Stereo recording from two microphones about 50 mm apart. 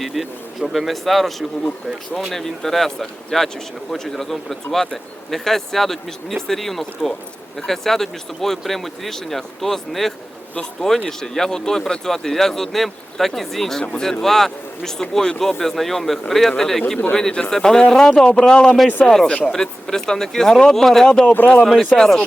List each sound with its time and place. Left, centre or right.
0.0 s a man's voice: centre